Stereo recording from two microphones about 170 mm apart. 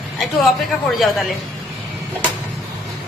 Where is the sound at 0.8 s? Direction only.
Centre (ahead or behind).